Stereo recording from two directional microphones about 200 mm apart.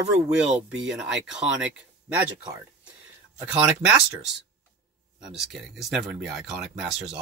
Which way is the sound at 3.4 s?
5° right (ahead or behind).